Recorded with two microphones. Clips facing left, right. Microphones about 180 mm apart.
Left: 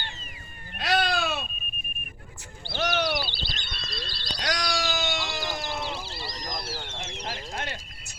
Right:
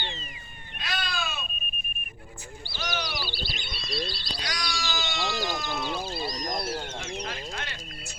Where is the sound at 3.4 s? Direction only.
10° right (ahead or behind).